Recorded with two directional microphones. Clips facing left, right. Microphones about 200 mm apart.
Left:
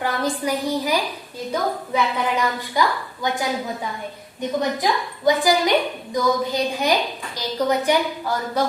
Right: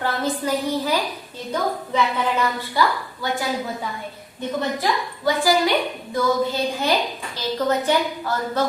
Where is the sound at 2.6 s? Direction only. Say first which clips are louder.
Even; 15° left (ahead or behind).